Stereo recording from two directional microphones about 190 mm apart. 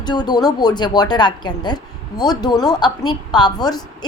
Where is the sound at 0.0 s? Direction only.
20° left (ahead or behind).